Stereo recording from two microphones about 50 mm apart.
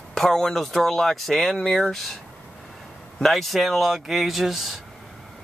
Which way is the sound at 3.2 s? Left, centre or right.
Centre.